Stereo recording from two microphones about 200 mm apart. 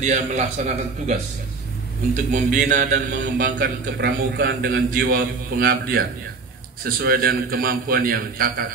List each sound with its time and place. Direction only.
0.0 s a man's voice: 35° right (ahead or behind)
2.3 s a man's voice: 40° right (ahead or behind)
3.4 s a man's voice: 55° right (ahead or behind)
5.1 s a man's voice: 50° right (ahead or behind)